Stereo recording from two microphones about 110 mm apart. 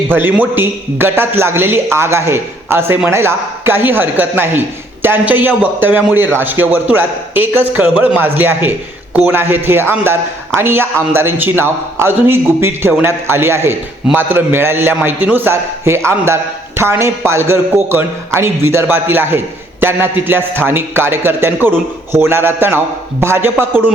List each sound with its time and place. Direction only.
0.1 s a man's voice: 20° right (ahead or behind)